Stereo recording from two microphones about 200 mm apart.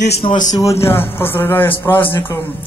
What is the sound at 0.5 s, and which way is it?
A man's voice, 15° left (ahead or behind).